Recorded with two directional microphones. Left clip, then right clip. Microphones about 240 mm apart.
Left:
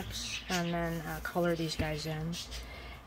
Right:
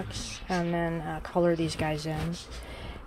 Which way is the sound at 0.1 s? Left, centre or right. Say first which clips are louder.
Right 1 dB; right.